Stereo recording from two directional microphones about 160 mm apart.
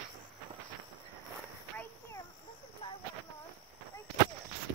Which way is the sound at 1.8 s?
15° left (ahead or behind).